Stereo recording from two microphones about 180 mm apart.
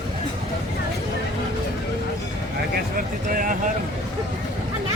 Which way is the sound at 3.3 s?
50° right (ahead or behind).